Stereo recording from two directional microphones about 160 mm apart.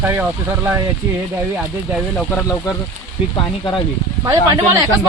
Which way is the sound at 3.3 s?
25° left (ahead or behind).